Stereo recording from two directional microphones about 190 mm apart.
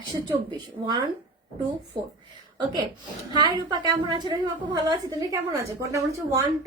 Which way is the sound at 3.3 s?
20° right (ahead or behind).